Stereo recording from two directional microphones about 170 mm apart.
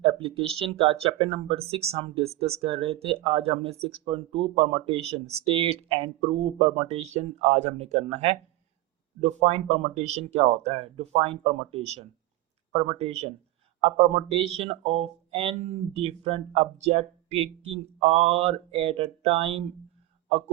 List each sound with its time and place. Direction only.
0.0 s speech: 30° right (ahead or behind)